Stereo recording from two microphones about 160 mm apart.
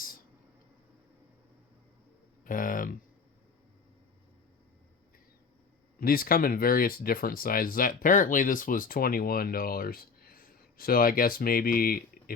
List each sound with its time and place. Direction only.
2.4 s speech: 60° left (ahead or behind)
6.0 s speech: 65° left (ahead or behind)